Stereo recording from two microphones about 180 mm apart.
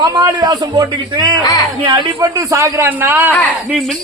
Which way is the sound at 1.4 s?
20° left (ahead or behind).